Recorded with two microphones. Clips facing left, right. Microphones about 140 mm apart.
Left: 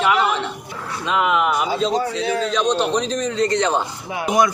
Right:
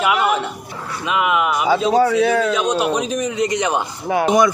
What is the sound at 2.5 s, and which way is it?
A man's voice, 10° right (ahead or behind).